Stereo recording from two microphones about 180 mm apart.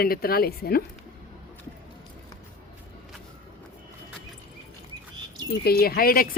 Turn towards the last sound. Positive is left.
turn(degrees=55)  # may be behind; listen again after turning